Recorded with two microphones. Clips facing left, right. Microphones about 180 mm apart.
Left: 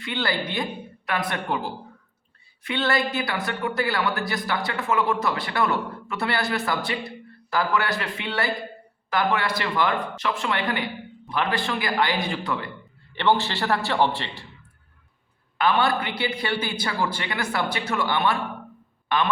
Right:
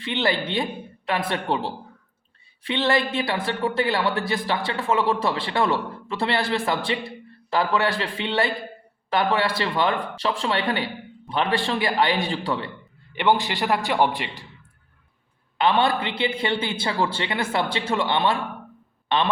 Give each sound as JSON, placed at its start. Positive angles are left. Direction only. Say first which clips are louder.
{"t": 0.0, "sound": "speech", "louder": "right 3 dB", "side_deg": -25}
{"t": 13.1, "sound": "a man's voice", "louder": "right 1 dB", "side_deg": -15}
{"t": 15.5, "sound": "speech", "louder": "right 1 dB", "side_deg": -25}